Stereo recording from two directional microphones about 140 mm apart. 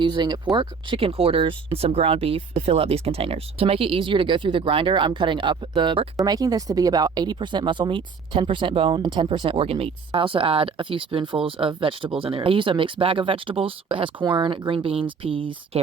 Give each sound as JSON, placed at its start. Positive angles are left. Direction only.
{"t": 0.0, "sound": "speech", "side_deg": -30}